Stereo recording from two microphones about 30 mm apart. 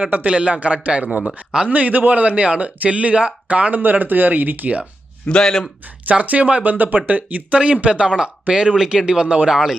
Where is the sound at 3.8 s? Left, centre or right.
Right.